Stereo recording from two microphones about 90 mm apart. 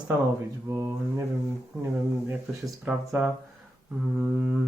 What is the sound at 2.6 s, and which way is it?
Speech, 10° right (ahead or behind).